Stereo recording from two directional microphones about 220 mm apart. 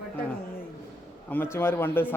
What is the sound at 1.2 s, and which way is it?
Speech, 10° left (ahead or behind).